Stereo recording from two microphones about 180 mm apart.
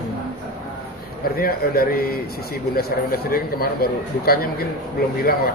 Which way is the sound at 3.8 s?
60° left (ahead or behind).